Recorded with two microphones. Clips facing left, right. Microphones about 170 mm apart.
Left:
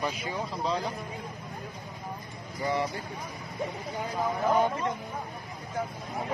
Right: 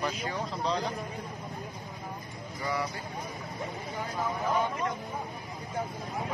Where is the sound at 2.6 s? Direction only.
25° left (ahead or behind).